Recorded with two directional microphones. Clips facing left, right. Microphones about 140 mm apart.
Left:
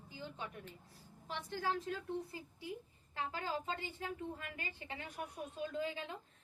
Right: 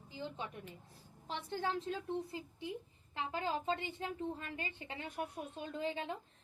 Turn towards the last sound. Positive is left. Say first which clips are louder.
# right 1 dB
turn(degrees=-25)  # may be behind; listen again after turning